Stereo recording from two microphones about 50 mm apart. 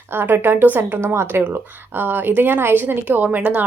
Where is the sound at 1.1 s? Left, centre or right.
Right.